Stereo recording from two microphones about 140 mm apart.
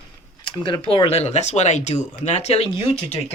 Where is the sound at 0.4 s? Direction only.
35° left (ahead or behind).